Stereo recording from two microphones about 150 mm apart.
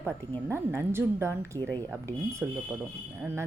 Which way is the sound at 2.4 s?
10° right (ahead or behind).